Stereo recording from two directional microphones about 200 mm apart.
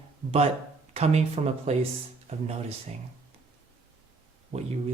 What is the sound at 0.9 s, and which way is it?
Speech, 30° right (ahead or behind).